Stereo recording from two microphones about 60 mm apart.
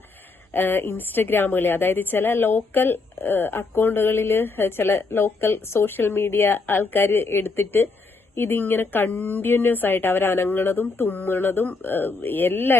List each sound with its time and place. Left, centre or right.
0.5 s a woman's voice: left